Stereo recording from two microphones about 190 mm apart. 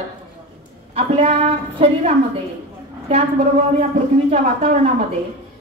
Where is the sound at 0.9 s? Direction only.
35° right (ahead or behind).